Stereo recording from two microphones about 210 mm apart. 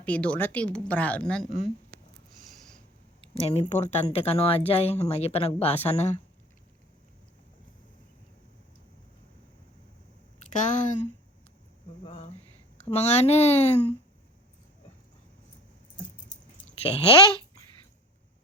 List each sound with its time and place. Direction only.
0.0 s a woman's voice: 5° left (ahead or behind)
2.4 s snort: centre (ahead or behind)
3.3 s speech: 30° left (ahead or behind)
10.5 s speech: 35° left (ahead or behind)
12.0 s a sound: 30° left (ahead or behind)
12.8 s speech: 30° left (ahead or behind)